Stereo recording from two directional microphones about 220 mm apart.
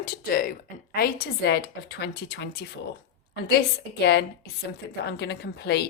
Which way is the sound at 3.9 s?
50° left (ahead or behind).